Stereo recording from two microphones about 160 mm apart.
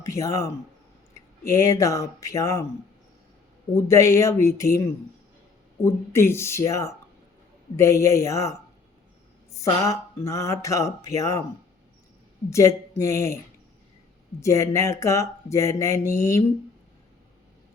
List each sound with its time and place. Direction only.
0.0 s speech: 20° left (ahead or behind)
3.8 s speech: 20° left (ahead or behind)
5.8 s speech: 15° left (ahead or behind)
9.6 s speech: 20° left (ahead or behind)
12.5 s speech: 20° left (ahead or behind)
14.4 s speech: 20° left (ahead or behind)